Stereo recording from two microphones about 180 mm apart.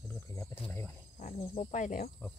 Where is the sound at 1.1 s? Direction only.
35° left (ahead or behind).